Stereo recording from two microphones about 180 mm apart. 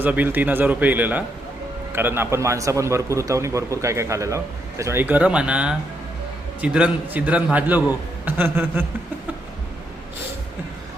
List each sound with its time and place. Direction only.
0.0 s a man's voice: 10° right (ahead or behind)